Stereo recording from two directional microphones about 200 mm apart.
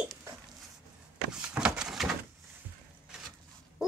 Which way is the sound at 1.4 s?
5° right (ahead or behind).